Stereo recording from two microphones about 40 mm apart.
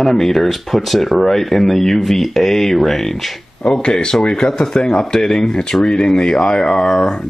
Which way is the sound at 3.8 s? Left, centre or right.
Left.